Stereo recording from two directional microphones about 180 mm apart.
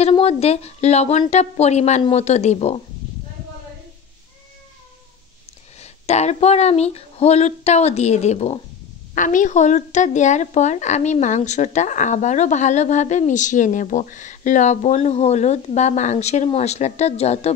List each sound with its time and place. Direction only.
0.0 s a woman's voice: 35° left (ahead or behind)
5.8 s a woman's voice: 35° left (ahead or behind)